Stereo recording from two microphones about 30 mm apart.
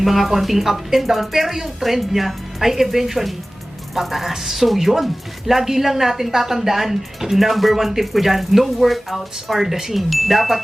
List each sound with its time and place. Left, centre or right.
0.0 s a woman's voice: centre
9.6 s speech: centre